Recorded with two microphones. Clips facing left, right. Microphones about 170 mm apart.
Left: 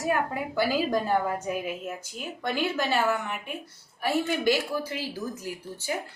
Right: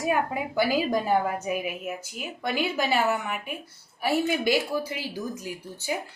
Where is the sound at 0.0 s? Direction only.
15° right (ahead or behind).